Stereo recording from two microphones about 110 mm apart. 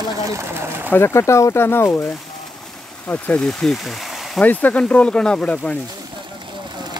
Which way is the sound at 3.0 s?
15° left (ahead or behind).